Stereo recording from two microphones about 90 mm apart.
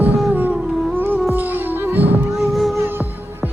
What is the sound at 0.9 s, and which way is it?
Music, 20° right (ahead or behind).